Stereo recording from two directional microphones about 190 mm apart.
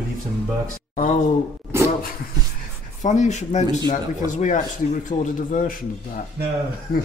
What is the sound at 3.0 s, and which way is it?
A man's voice, 40° left (ahead or behind).